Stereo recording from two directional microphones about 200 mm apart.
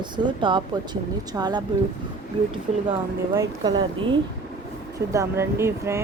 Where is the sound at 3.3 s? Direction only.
20° right (ahead or behind).